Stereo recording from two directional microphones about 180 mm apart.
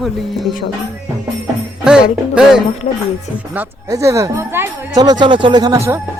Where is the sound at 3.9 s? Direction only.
15° right (ahead or behind).